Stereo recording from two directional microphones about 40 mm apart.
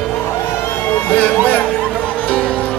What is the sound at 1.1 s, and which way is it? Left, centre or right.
Music, left.